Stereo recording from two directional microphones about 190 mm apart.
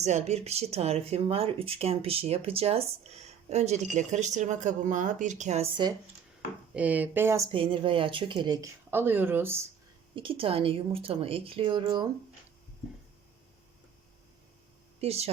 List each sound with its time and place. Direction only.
0.0 s speech: 35° right (ahead or behind)
6.7 s speech: 5° right (ahead or behind)
7.5 s speech: 25° right (ahead or behind); by 9.6 s 10° right (ahead or behind)
10.2 s speech: 30° right (ahead or behind)
15.0 s speech: 35° right (ahead or behind)